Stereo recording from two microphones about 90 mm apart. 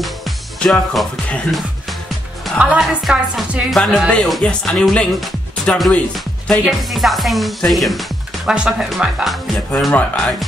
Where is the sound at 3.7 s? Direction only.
5° left (ahead or behind).